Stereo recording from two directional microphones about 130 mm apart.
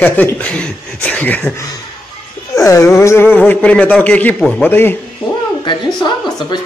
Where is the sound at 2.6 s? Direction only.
25° left (ahead or behind).